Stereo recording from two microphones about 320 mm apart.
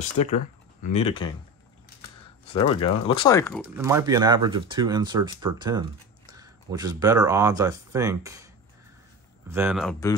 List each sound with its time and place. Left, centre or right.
0.0 s speech: left
2.5 s speech: centre
3.7 s speech: centre
9.5 s speech: centre